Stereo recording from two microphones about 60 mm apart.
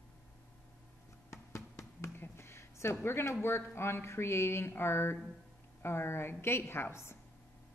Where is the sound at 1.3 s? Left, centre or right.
Left.